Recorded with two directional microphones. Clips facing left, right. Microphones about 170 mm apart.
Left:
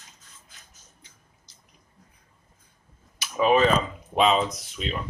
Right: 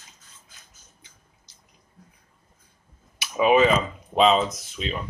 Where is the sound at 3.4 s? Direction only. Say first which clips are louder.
Right 2 dB; 10° right (ahead or behind).